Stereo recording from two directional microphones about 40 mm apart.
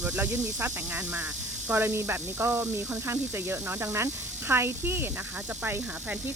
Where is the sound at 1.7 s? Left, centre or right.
Right.